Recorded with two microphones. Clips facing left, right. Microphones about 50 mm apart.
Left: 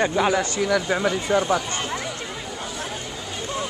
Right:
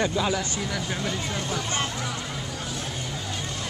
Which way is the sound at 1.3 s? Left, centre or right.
Left.